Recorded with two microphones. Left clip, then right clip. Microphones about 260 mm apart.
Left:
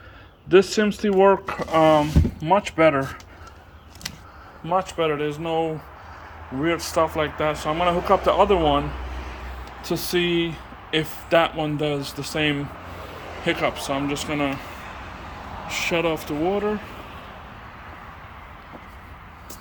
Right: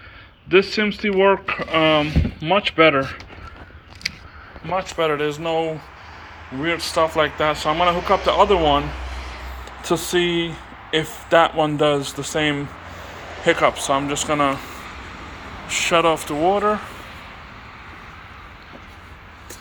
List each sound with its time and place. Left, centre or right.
0.5 s speech: left
4.9 s speech: centre
6.9 s speech: centre
9.0 s a sound: left
9.9 s speech: centre
15.6 s speech: centre